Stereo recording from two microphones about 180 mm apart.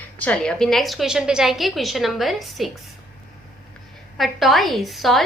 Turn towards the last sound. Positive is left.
turn(degrees=0)  # may be behind; listen again after turning